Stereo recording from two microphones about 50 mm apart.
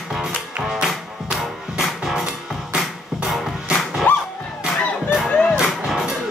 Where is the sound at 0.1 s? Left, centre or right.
Centre.